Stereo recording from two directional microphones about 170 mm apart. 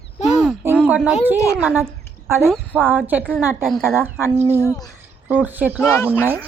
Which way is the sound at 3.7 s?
Centre (ahead or behind).